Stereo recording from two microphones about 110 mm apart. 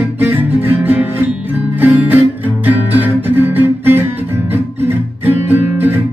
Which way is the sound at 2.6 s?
15° right (ahead or behind).